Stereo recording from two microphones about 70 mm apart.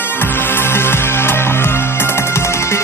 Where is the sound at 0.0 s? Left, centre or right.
Left.